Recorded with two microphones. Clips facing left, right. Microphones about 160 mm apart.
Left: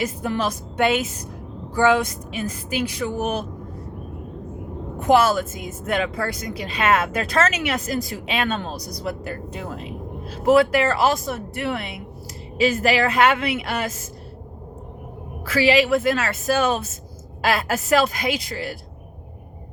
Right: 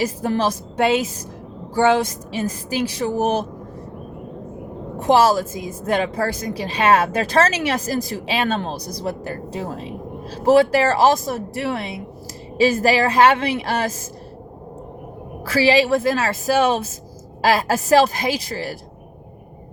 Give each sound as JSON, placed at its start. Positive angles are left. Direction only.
{"t": 0.0, "sound": "speech", "side_deg": -35}
{"t": 5.0, "sound": "speech", "side_deg": -35}
{"t": 15.6, "sound": "speech", "side_deg": -35}